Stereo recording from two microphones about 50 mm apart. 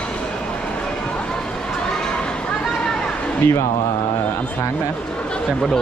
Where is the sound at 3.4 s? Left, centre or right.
Left.